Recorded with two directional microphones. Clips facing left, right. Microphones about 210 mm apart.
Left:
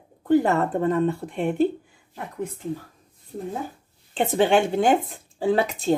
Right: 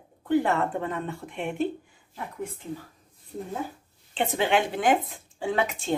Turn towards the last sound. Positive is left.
turn(degrees=35)  # may be behind; listen again after turning